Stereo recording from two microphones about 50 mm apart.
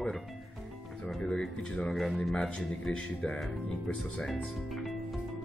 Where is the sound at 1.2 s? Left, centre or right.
Centre.